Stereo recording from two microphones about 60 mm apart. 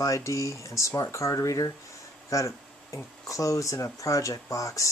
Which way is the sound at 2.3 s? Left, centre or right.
Left.